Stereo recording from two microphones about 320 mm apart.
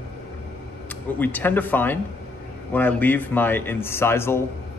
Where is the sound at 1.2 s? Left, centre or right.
Centre.